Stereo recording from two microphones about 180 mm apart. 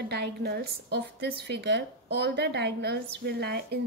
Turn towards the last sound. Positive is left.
turn(degrees=-65)  # may be behind; listen again after turning